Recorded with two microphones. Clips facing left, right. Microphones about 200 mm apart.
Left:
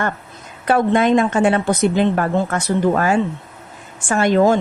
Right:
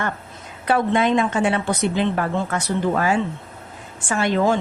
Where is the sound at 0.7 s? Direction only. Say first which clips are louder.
Left 4 dB; 45° left (ahead or behind).